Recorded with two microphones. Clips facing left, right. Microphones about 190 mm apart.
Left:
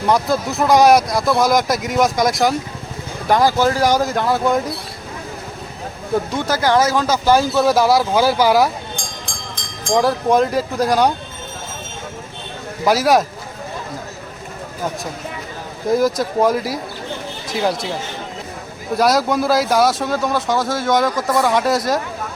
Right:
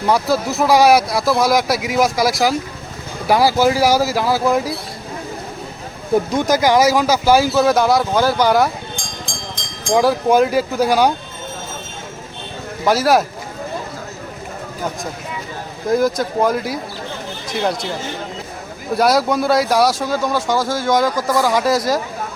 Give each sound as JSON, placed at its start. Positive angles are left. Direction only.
{"t": 0.0, "sound": "speech", "side_deg": 0}
{"t": 6.3, "sound": "speech", "side_deg": -15}
{"t": 9.9, "sound": "speech", "side_deg": -5}
{"t": 12.8, "sound": "speech", "side_deg": 0}
{"t": 15.9, "sound": "speech", "side_deg": 0}
{"t": 18.9, "sound": "speech", "side_deg": 0}